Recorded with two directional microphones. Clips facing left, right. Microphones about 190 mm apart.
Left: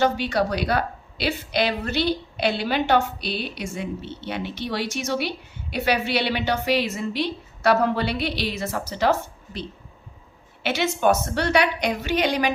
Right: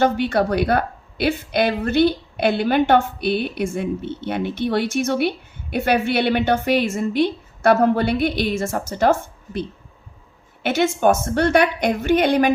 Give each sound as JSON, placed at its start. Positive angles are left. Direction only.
{"t": 0.0, "sound": "a woman's voice", "side_deg": -55}